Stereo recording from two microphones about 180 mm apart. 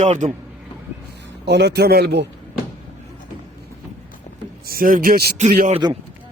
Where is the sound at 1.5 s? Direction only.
70° right (ahead or behind).